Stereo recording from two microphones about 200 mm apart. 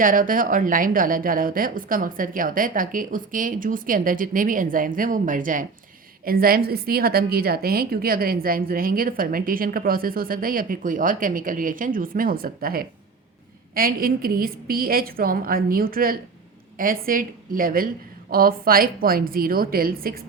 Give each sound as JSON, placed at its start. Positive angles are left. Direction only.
{"t": 0.0, "sound": "a woman's voice", "side_deg": -45}